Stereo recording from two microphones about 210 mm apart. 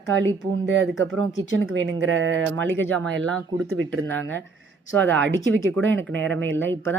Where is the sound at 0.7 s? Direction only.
65° right (ahead or behind).